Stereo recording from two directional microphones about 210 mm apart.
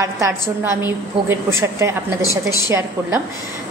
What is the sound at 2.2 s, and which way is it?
Speech, 15° left (ahead or behind).